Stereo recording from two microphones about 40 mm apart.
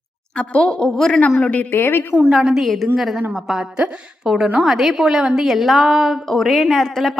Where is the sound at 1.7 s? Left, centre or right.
Left.